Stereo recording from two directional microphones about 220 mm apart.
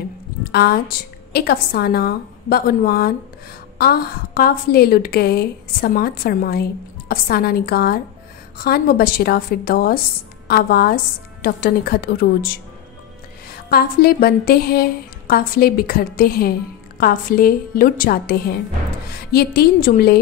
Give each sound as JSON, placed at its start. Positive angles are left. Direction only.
{"t": 0.4, "sound": "a woman's voice", "side_deg": 45}